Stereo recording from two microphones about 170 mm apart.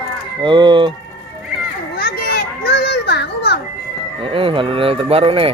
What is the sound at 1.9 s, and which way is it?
Children playing, 65° left (ahead or behind).